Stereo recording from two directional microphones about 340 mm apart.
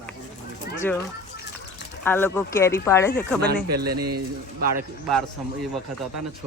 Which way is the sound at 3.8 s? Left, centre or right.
Right.